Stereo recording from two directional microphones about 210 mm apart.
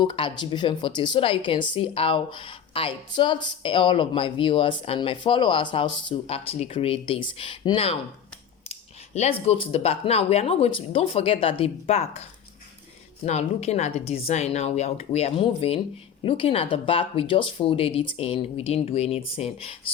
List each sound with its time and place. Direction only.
0.0 s a woman's voice: 20° left (ahead or behind)
8.7 s scissors: 30° left (ahead or behind)
9.5 s a woman's voice: 30° left (ahead or behind)
13.2 s a woman's voice: 30° left (ahead or behind)